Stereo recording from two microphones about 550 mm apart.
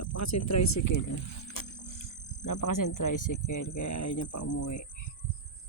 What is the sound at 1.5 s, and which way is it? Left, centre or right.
Music, left.